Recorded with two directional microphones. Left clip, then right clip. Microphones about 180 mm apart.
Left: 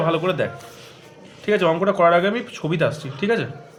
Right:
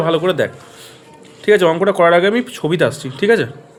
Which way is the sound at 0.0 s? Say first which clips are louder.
Right 5 dB; 45° right (ahead or behind).